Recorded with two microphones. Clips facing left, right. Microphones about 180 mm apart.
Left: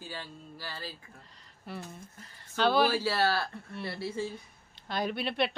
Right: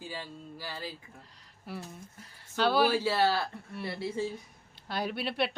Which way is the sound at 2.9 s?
20° right (ahead or behind).